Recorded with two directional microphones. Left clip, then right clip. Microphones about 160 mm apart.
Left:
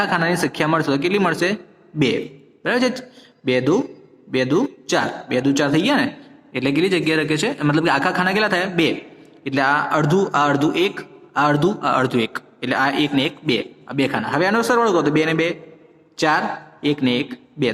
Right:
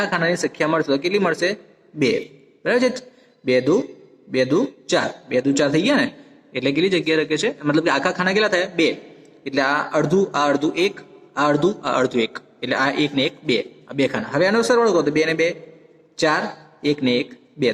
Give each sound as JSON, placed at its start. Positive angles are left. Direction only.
{"t": 0.0, "sound": "a man's voice", "side_deg": 35}